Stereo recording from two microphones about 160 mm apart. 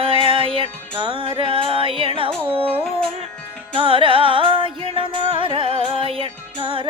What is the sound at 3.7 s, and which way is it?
Music, 35° right (ahead or behind).